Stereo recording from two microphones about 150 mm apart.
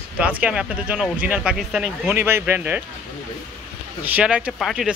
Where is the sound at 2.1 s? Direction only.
15° right (ahead or behind).